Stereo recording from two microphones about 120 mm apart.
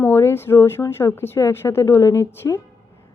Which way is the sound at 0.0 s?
20° left (ahead or behind).